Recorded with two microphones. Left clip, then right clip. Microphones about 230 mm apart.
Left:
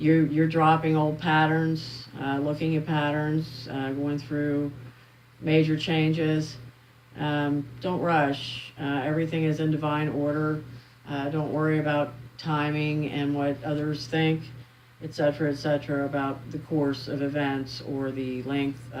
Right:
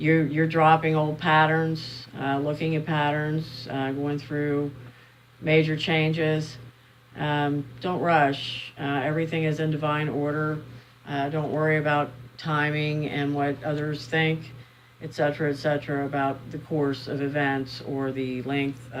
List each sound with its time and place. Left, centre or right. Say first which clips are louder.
0.0 s speech: even; right